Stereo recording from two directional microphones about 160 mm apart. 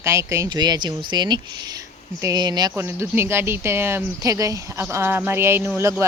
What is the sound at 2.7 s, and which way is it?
Speech, 15° right (ahead or behind).